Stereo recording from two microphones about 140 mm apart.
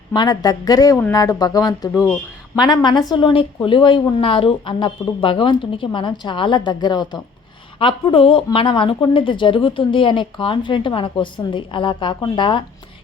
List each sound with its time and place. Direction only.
0.1 s a woman's voice: 30° left (ahead or behind)